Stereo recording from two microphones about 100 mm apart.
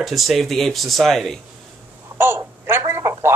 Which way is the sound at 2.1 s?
25° right (ahead or behind).